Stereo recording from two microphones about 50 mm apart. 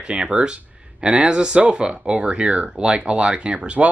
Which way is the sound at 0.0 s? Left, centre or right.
Right.